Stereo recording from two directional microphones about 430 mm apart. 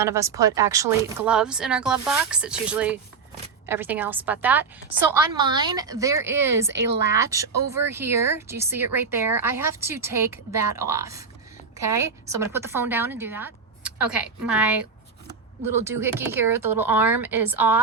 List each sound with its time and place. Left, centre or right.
0.0 s speech: centre